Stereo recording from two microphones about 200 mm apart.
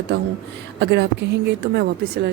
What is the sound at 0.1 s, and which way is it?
Speech, 55° right (ahead or behind).